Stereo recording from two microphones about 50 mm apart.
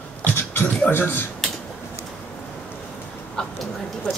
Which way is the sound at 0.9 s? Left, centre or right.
Left.